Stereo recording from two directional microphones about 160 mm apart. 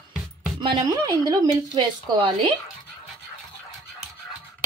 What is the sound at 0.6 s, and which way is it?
Speech, 30° right (ahead or behind).